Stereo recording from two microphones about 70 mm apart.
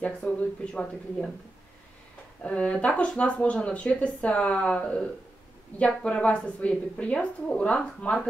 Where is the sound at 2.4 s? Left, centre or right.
Centre.